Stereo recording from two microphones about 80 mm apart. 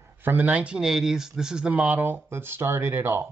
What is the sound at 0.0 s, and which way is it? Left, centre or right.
Speech, right.